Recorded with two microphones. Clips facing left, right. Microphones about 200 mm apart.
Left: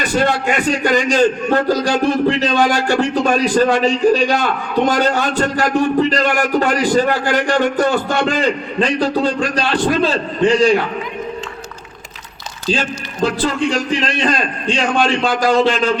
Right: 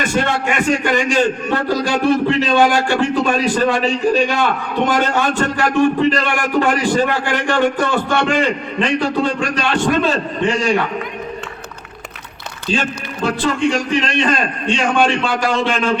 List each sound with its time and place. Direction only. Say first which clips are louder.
0.0 s a man's voice: left 2 dB; 35° left (ahead or behind)
13.2 s a man's voice: even; 35° left (ahead or behind)